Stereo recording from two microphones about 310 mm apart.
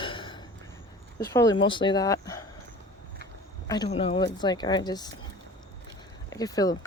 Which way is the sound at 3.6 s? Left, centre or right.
Centre.